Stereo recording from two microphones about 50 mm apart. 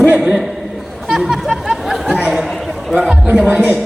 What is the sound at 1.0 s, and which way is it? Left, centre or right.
Chatter, centre.